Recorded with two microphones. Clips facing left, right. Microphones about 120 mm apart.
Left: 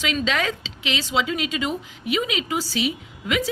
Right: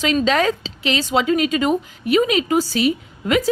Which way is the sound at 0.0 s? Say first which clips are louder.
Right 7 dB; 40° right (ahead or behind).